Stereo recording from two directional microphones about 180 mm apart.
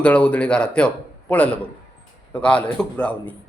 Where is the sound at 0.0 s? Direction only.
10° left (ahead or behind).